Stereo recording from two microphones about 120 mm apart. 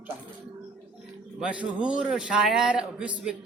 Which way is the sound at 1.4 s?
10° right (ahead or behind).